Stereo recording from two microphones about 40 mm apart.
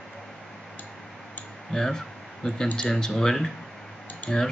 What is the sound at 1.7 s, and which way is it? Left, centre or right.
Speech, centre.